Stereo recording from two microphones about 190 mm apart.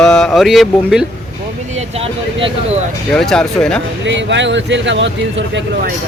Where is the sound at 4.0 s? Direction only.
70° right (ahead or behind).